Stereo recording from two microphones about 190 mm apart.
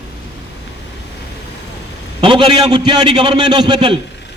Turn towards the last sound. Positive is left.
turn(degrees=-25)  # may be behind; listen again after turning